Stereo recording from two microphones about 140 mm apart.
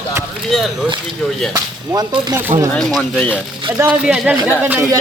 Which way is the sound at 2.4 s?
20° right (ahead or behind).